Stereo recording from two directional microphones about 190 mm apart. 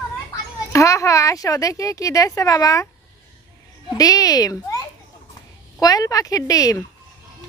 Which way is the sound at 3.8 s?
20° left (ahead or behind).